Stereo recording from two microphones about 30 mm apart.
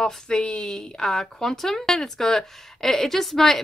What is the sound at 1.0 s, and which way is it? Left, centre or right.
Speech, centre.